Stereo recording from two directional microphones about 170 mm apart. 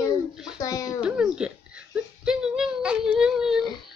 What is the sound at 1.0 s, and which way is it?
Speech, 5° right (ahead or behind).